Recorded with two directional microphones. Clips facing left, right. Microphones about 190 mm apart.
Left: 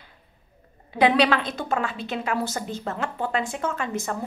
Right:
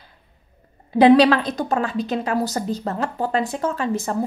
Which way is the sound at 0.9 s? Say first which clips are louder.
Right 7 dB; 35° right (ahead or behind).